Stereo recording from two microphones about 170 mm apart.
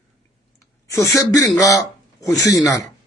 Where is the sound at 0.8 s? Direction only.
20° left (ahead or behind).